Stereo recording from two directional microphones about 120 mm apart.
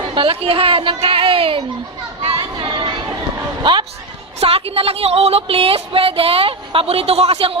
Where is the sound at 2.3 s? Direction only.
40° right (ahead or behind).